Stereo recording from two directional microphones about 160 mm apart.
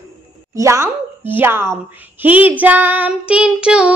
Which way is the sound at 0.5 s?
20° right (ahead or behind).